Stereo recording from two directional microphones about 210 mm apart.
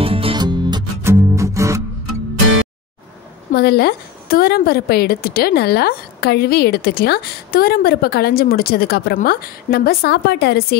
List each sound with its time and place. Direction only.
0.0 s music: 25° right (ahead or behind)
3.5 s a woman's voice: 50° left (ahead or behind)